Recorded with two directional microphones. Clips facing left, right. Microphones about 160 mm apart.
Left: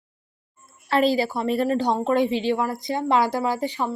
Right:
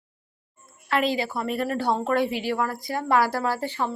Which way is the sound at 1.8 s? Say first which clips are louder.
Left 2 dB; 15° left (ahead or behind).